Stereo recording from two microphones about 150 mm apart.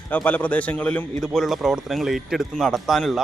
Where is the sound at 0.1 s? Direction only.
10° left (ahead or behind).